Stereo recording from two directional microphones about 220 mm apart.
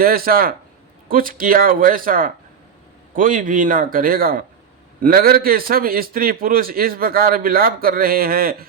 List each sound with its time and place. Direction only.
0.0 s a man's voice: 40° right (ahead or behind)